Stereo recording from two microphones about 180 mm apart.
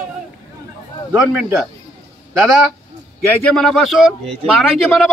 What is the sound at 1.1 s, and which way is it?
Speech, 10° right (ahead or behind).